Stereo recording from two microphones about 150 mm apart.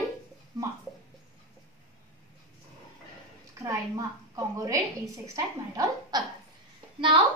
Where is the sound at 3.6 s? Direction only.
20° right (ahead or behind).